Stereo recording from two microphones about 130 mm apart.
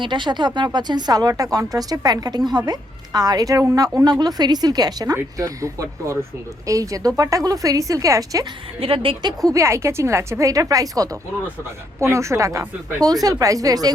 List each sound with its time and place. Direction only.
0.0 s a woman's voice: 35° right (ahead or behind)
8.8 s a woman's voice: 45° right (ahead or behind)
9.4 s a woman's voice: 25° right (ahead or behind)